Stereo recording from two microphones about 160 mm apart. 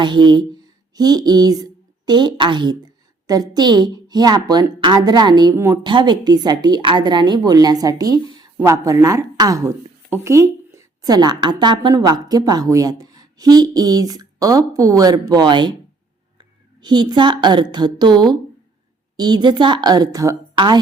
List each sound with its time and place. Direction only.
0.0 s a woman's voice: 30° right (ahead or behind)